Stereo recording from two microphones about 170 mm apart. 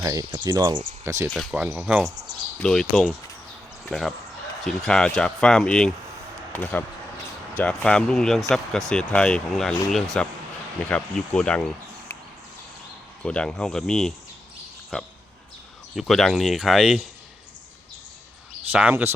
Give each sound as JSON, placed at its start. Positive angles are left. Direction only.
{"t": 0.0, "sound": "speech", "side_deg": -20}
{"t": 1.0, "sound": "speech", "side_deg": -15}
{"t": 1.3, "sound": "speech", "side_deg": 0}
{"t": 2.6, "sound": "speech", "side_deg": 5}
{"t": 13.2, "sound": "speech", "side_deg": 5}
{"t": 18.7, "sound": "speech", "side_deg": -10}